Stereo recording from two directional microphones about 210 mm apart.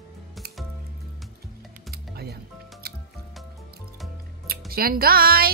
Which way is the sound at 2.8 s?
45° right (ahead or behind).